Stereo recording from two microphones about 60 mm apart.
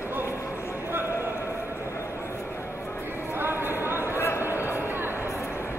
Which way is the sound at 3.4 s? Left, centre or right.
Right.